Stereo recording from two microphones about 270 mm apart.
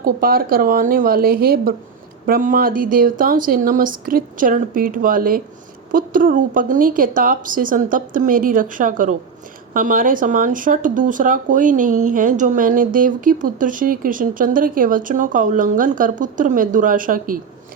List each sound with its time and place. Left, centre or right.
0.0 s speech: right